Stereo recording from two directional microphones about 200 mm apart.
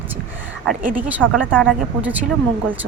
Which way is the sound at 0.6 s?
10° right (ahead or behind).